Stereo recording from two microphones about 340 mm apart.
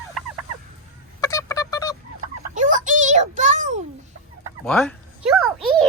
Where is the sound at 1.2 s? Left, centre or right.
Centre.